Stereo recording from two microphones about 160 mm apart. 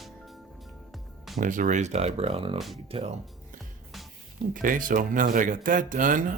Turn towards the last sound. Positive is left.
turn(degrees=-55)  # may be behind; listen again after turning